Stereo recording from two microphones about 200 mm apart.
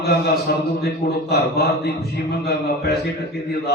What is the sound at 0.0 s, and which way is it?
A man's voice, 55° left (ahead or behind).